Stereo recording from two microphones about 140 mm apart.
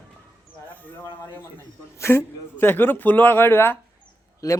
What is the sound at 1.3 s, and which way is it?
Speech, 15° left (ahead or behind).